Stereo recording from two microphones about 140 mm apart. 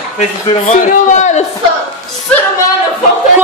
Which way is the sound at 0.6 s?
65° left (ahead or behind).